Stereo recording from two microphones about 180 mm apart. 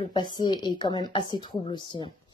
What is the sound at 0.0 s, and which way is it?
Speech, 25° left (ahead or behind).